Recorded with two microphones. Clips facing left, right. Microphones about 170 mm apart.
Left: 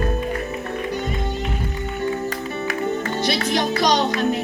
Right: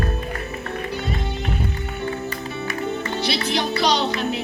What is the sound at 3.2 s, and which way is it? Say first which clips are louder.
Speech: left 2 dB; 50° left (ahead or behind).